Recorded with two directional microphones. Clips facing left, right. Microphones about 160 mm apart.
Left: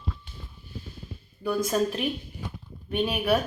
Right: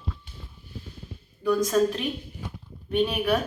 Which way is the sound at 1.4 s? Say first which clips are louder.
Right 3 dB; 10° left (ahead or behind).